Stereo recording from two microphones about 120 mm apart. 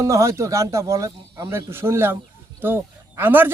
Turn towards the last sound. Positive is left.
turn(degrees=-15)  # may be behind; listen again after turning